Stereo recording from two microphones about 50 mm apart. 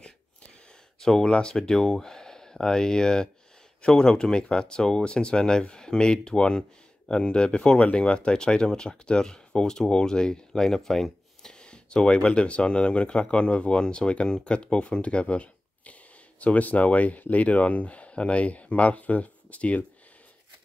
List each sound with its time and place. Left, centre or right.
0.9 s speech: centre; by 19.8 s left